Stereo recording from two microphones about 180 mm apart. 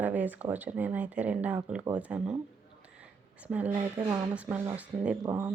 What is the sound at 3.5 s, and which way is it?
Speech, 10° right (ahead or behind).